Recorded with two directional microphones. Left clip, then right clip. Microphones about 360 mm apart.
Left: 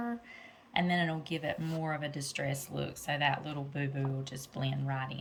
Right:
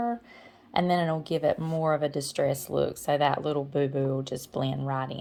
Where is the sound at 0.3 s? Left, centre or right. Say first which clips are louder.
Right 2 dB; centre.